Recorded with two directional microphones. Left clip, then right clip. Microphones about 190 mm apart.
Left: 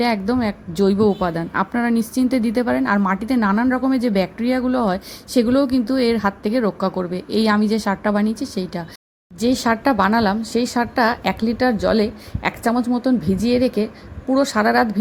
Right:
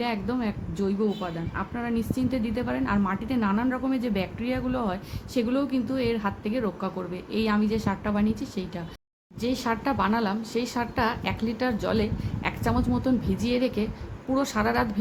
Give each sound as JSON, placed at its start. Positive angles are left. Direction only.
{"t": 0.0, "sound": "a woman's voice", "side_deg": 35}